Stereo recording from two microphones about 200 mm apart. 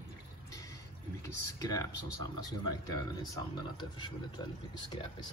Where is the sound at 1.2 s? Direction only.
15° left (ahead or behind).